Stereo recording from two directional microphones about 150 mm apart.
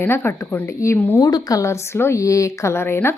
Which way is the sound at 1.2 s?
25° left (ahead or behind).